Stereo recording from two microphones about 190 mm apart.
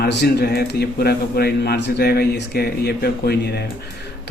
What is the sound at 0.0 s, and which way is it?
Speech, 60° left (ahead or behind).